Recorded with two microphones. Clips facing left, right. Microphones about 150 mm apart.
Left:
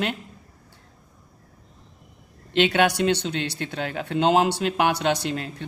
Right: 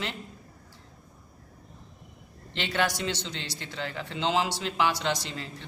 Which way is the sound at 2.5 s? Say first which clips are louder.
Left 9 dB; 60° left (ahead or behind).